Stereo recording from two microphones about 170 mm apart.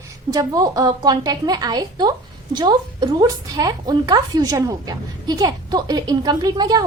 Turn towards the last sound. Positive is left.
turn(degrees=-25)  # may be behind; listen again after turning